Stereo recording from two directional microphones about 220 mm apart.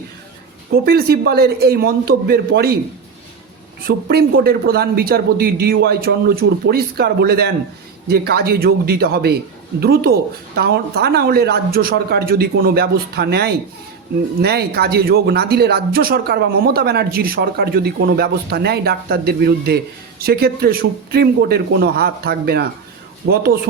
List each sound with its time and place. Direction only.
0.7 s speech: 45° right (ahead or behind)
3.8 s speech: 45° right (ahead or behind)